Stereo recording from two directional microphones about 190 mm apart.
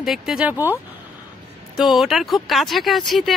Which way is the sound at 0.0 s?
Centre (ahead or behind).